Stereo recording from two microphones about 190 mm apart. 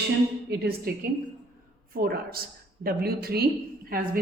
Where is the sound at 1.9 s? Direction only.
55° right (ahead or behind).